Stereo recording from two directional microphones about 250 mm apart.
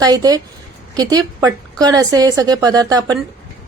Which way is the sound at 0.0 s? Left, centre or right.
Centre.